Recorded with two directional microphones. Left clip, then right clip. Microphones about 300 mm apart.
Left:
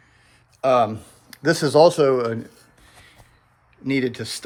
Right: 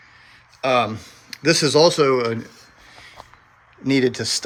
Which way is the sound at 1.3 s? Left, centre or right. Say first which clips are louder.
Right 3 dB; left.